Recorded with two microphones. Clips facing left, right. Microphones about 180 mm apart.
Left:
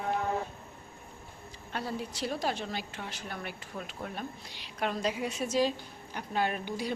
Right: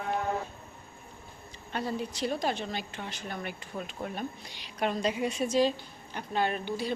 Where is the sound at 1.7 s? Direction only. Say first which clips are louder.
Right 3 dB; 5° left (ahead or behind).